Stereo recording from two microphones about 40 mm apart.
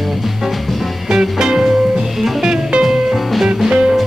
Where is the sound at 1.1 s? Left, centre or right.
Centre.